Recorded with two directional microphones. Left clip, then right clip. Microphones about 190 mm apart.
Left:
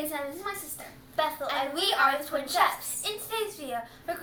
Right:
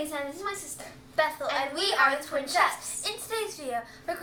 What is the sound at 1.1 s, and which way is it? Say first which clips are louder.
Speech: right 2 dB; 15° right (ahead or behind).